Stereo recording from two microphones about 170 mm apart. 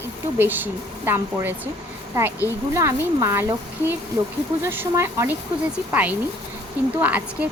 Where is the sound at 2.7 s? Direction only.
15° right (ahead or behind).